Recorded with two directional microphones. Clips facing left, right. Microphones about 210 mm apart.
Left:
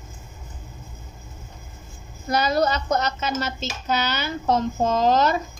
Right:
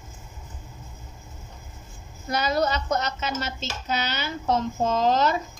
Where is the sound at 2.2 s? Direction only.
40° left (ahead or behind).